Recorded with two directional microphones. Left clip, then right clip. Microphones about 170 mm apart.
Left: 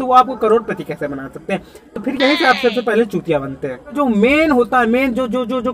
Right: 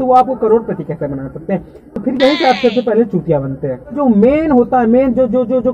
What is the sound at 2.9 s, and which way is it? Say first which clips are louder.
Speech: right 2 dB; 15° left (ahead or behind).